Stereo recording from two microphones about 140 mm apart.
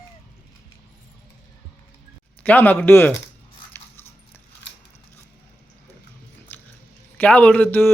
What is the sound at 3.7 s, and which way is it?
Dog, 15° left (ahead or behind).